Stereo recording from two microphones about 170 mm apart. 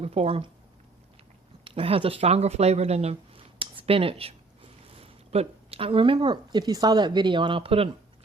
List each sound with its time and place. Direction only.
0.0 s speech: 35° right (ahead or behind)
1.6 s speech: 35° right (ahead or behind)